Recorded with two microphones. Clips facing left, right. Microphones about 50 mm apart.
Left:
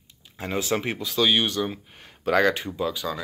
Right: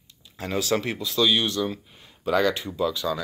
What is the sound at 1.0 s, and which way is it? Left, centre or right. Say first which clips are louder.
Speech: left 2 dB; left.